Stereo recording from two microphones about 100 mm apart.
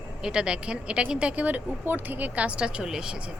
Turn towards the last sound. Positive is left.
turn(degrees=-5)  # may be behind; listen again after turning